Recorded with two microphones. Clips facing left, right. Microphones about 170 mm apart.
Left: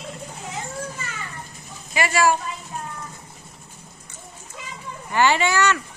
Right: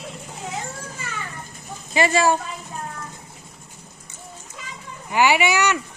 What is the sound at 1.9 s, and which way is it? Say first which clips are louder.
Speech: right 2 dB; 25° right (ahead or behind).